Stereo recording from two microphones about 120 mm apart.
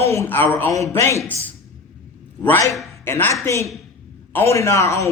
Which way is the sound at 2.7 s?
Centre (ahead or behind).